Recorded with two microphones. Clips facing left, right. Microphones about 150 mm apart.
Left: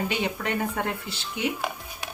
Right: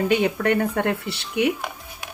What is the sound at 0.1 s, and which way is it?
Speech, 60° right (ahead or behind).